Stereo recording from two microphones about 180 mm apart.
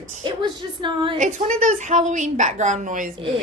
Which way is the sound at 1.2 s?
45° right (ahead or behind).